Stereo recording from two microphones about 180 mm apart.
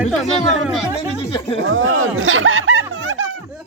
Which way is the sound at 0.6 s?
Centre (ahead or behind).